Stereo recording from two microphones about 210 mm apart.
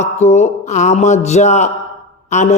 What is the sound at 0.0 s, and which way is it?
Speech, 35° left (ahead or behind).